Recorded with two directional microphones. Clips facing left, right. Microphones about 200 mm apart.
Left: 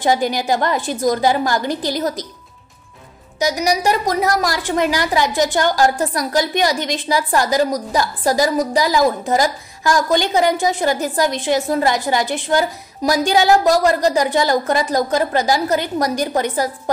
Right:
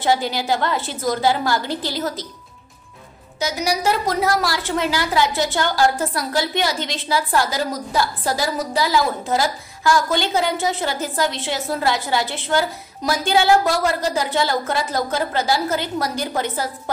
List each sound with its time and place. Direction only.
0.0 s a woman's voice: 15° left (ahead or behind)
3.3 s a woman's voice: 15° left (ahead or behind)
13.5 s a woman's voice: 40° left (ahead or behind)
14.1 s a woman's voice: 15° left (ahead or behind)